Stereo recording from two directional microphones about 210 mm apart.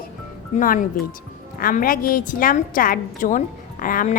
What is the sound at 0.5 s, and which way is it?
A woman's voice, 40° left (ahead or behind).